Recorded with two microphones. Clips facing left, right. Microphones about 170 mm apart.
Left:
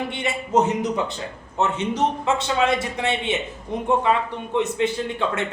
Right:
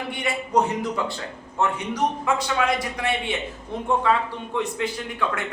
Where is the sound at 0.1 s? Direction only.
25° left (ahead or behind).